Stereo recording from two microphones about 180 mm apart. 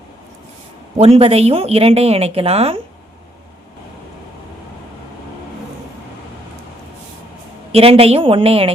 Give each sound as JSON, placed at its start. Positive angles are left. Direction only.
{"t": 0.9, "sound": "a woman's voice", "side_deg": -35}
{"t": 7.7, "sound": "a woman's voice", "side_deg": -30}